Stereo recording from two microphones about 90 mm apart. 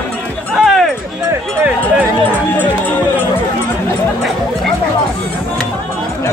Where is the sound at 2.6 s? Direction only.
20° left (ahead or behind).